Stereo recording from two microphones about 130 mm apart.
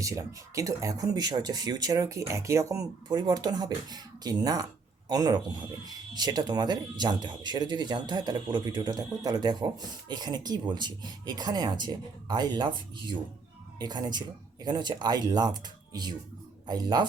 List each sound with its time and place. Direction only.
0.0 s speech: 25° right (ahead or behind)